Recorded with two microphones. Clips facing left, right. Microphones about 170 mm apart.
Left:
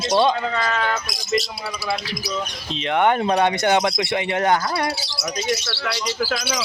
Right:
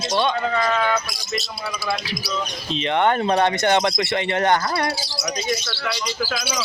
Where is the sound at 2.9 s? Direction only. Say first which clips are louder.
Left 1 dB; 10° left (ahead or behind).